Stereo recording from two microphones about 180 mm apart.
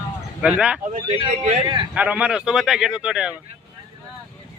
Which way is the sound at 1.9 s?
5° right (ahead or behind).